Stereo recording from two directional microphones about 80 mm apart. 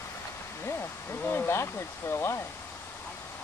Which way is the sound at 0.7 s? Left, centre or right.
Left.